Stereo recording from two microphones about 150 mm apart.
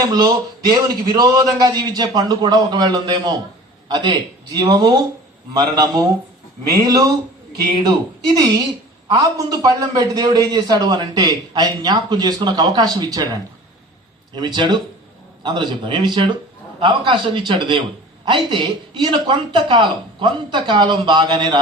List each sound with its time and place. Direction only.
0.0 s a man's voice: 25° right (ahead or behind)
9.1 s a man's voice: 25° right (ahead or behind)